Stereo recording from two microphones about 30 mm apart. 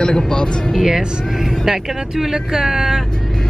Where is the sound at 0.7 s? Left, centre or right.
Centre.